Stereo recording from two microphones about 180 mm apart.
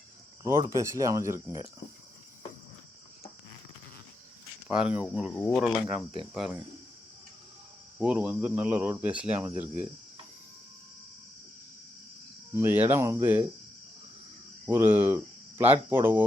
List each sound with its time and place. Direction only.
0.4 s speech: 15° right (ahead or behind)
4.7 s speech: 5° right (ahead or behind)
7.9 s speech: 5° right (ahead or behind)
12.5 s speech: 10° right (ahead or behind)
14.7 s speech: 10° right (ahead or behind)